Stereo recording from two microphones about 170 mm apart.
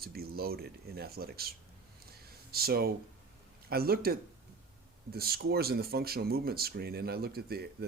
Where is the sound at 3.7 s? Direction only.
65° right (ahead or behind).